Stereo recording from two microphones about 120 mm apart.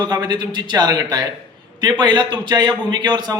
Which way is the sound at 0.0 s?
35° right (ahead or behind).